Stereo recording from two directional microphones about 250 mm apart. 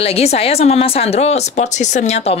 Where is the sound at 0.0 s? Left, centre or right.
Left.